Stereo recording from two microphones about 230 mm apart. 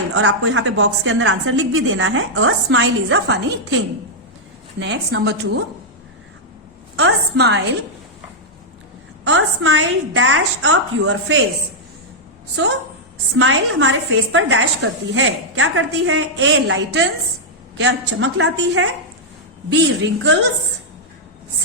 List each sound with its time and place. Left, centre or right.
0.1 s a woman's voice: right
6.9 s a woman's voice: right
9.2 s a woman's voice: right
13.3 s a woman's voice: right